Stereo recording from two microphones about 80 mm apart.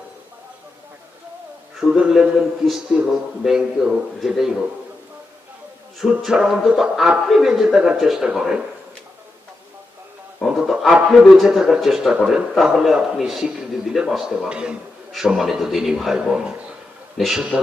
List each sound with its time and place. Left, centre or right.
1.8 s a man's voice: centre
6.0 s a man's voice: centre
10.4 s a man's voice: centre